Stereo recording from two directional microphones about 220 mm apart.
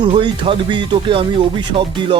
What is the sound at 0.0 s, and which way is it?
Speech, 25° right (ahead or behind).